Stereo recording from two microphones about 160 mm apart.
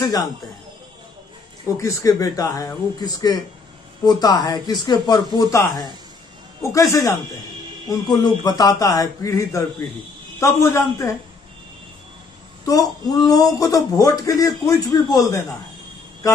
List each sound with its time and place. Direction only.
1.8 s a man's voice: 20° left (ahead or behind)
12.6 s a man's voice: 25° left (ahead or behind)